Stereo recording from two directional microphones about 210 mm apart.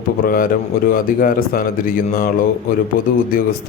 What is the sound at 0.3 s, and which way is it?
Speech, 45° left (ahead or behind).